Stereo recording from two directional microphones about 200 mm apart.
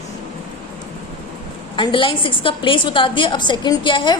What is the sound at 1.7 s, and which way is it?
A woman's voice, 25° left (ahead or behind).